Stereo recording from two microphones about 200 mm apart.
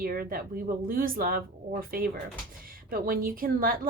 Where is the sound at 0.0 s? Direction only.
45° right (ahead or behind).